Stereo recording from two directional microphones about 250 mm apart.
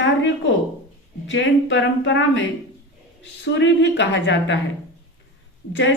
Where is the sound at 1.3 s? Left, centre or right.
Left.